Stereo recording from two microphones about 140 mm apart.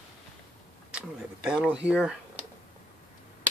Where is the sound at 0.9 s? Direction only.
5° right (ahead or behind).